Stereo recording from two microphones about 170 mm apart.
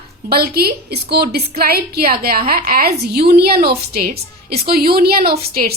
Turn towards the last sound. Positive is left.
turn(degrees=-65)  # may be behind; listen again after turning